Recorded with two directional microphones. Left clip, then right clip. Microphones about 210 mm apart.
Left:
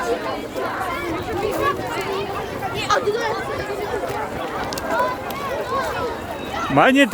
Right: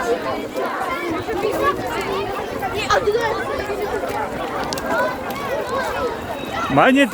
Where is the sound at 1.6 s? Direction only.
50° left (ahead or behind).